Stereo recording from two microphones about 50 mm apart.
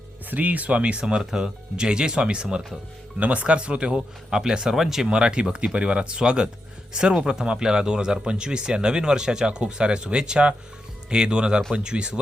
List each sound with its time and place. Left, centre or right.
0.3 s speech: right; by 5.0 s centre
5.0 s speech: centre